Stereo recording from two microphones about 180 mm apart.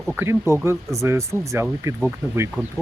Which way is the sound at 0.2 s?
15° right (ahead or behind).